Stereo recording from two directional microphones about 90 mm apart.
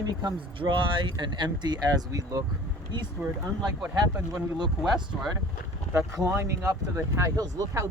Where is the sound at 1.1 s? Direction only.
55° right (ahead or behind).